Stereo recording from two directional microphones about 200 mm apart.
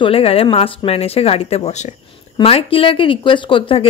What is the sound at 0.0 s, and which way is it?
Speech, 30° left (ahead or behind).